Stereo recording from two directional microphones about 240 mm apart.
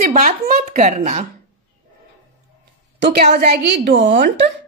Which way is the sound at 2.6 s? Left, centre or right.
Right.